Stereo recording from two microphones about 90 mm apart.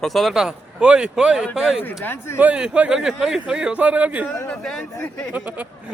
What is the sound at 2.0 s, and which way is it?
Speech, 25° left (ahead or behind).